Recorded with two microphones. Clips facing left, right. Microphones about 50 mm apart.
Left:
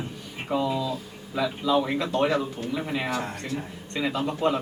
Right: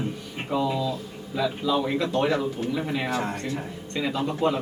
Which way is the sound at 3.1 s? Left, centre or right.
Right.